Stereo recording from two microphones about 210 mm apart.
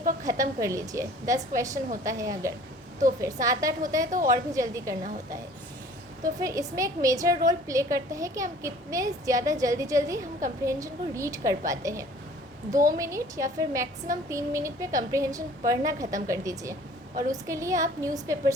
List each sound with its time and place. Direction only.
0.3 s a woman's voice: 15° right (ahead or behind)
6.2 s a woman's voice: 15° right (ahead or behind)